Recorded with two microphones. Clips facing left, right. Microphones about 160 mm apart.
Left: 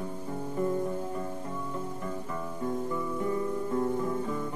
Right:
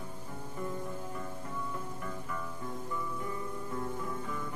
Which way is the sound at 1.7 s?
25° left (ahead or behind).